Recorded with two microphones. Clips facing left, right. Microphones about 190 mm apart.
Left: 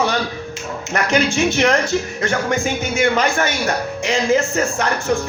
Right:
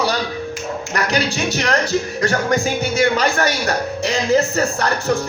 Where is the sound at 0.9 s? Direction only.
35° right (ahead or behind).